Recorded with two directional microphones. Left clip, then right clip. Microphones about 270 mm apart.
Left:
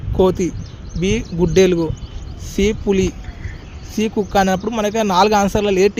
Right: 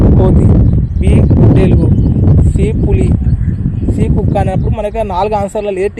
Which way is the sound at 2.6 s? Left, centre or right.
Left.